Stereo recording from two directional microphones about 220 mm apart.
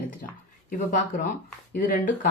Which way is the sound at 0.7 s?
35° left (ahead or behind).